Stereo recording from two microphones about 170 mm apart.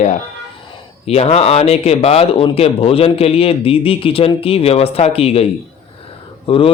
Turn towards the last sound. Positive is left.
turn(degrees=30)  # may be behind; listen again after turning